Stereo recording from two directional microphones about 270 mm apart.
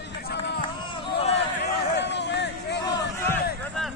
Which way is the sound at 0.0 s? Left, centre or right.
Left.